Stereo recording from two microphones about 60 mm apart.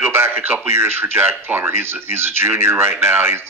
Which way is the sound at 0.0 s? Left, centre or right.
Right.